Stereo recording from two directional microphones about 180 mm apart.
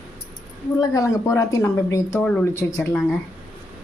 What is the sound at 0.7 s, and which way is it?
A woman's voice, 20° left (ahead or behind).